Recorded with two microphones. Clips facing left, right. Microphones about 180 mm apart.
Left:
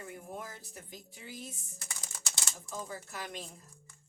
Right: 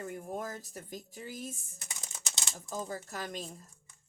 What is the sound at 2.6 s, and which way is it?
Speech, 40° right (ahead or behind).